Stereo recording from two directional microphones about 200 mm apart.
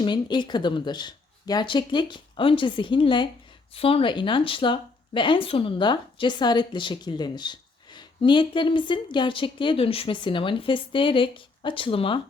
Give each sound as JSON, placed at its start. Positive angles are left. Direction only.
{"t": 0.0, "sound": "speech", "side_deg": 25}